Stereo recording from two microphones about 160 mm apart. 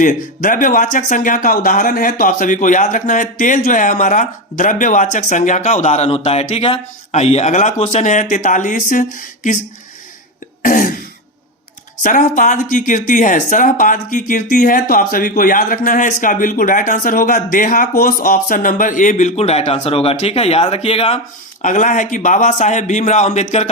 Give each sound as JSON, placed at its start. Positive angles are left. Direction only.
{"t": 0.0, "sound": "speech", "side_deg": 55}
{"t": 10.6, "sound": "throat clearing", "side_deg": 60}
{"t": 12.0, "sound": "speech", "side_deg": 55}
{"t": 21.6, "sound": "speech", "side_deg": 55}